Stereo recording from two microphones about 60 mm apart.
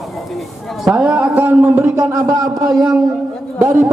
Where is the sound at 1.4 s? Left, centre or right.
Right.